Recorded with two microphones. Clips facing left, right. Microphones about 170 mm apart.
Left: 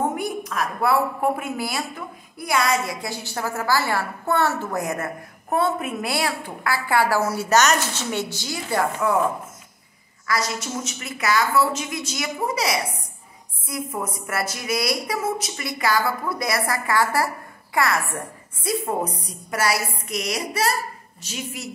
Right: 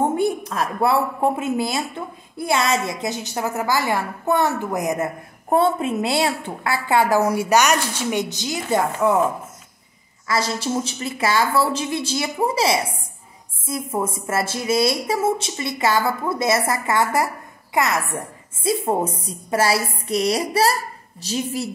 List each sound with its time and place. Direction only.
0.1 s a woman's voice: 30° right (ahead or behind)
10.2 s a woman's voice: 30° right (ahead or behind)
20.1 s music: 30° right (ahead or behind)